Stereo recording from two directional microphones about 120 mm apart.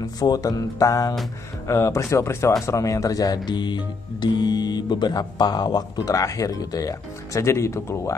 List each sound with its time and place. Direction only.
0.2 s speech: 30° left (ahead or behind)